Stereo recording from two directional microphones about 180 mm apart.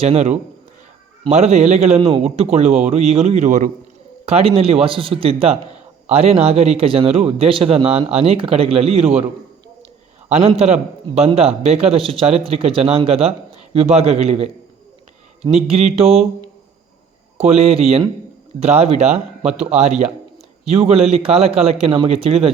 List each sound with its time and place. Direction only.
0.0 s a man's voice: 35° right (ahead or behind)
10.2 s a man's voice: 35° right (ahead or behind)
17.3 s a man's voice: 35° right (ahead or behind)